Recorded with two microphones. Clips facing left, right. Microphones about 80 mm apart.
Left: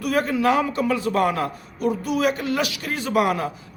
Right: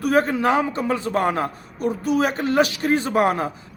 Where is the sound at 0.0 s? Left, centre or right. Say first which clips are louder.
Right 2 dB; right.